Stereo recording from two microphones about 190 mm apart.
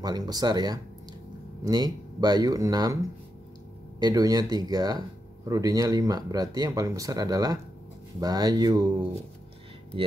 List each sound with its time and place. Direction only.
0.0 s speech: 20° right (ahead or behind)
4.0 s speech: 20° right (ahead or behind)